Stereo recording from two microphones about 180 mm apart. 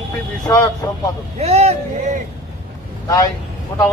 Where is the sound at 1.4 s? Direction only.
35° right (ahead or behind).